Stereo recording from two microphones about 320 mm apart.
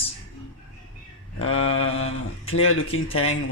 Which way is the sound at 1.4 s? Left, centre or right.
Left.